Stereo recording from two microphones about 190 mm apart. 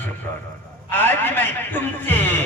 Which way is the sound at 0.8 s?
10° left (ahead or behind).